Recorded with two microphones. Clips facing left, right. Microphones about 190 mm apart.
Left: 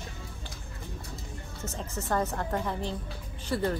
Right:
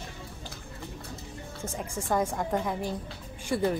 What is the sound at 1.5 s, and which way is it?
A woman's voice, 10° right (ahead or behind).